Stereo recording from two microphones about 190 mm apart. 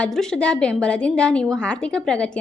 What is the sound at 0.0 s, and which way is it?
A woman's voice, 5° left (ahead or behind).